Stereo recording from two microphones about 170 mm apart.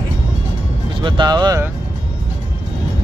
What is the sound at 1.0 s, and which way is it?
Speech, 25° right (ahead or behind).